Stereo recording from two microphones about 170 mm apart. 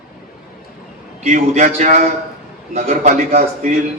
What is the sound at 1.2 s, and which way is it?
A man's voice, 45° right (ahead or behind).